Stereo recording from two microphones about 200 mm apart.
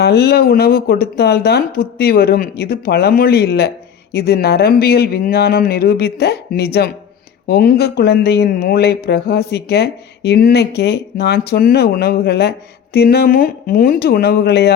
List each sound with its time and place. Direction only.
0.0 s speech: 55° left (ahead or behind)